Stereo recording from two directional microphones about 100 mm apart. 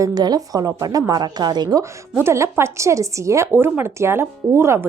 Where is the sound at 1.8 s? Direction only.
25° right (ahead or behind).